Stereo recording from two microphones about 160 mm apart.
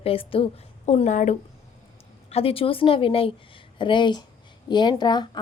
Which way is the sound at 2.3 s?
40° left (ahead or behind).